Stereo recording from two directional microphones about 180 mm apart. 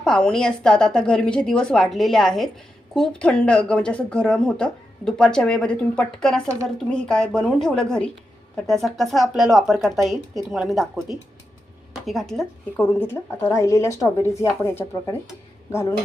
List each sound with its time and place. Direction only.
0.0 s speech: 5° left (ahead or behind)
13.3 s a woman's voice: 15° left (ahead or behind)